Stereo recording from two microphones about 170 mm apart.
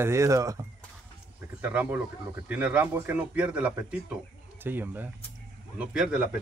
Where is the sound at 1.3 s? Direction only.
10° right (ahead or behind).